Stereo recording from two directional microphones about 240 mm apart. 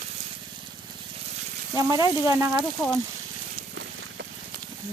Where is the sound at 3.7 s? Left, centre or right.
Right.